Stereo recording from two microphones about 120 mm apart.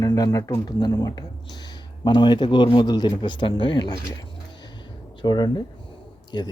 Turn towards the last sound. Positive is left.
turn(degrees=35)  # may be behind; listen again after turning